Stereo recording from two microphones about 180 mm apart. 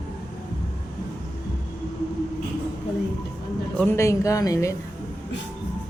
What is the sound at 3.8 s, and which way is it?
Speech, 15° left (ahead or behind).